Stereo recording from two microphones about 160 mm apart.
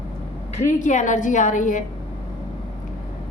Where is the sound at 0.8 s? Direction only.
50° left (ahead or behind).